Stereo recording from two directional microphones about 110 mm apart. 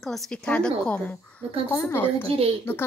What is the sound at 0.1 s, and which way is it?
Speech, 10° left (ahead or behind).